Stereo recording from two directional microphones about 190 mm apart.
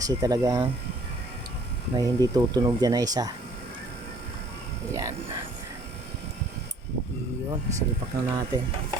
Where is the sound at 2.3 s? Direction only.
20° right (ahead or behind).